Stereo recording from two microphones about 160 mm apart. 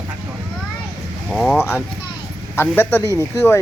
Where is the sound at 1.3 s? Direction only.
Centre (ahead or behind).